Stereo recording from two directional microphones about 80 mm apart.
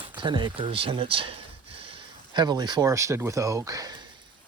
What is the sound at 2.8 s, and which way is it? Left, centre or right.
Speech, right.